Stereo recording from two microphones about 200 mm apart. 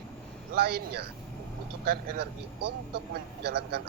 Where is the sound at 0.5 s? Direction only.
50° right (ahead or behind).